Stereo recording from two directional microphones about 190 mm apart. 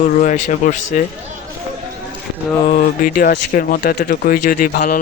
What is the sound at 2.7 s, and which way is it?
Speech, 45° left (ahead or behind).